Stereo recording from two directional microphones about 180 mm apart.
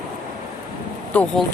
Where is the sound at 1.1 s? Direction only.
5° left (ahead or behind).